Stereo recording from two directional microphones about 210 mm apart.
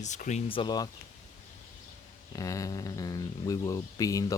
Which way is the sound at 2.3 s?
15° left (ahead or behind).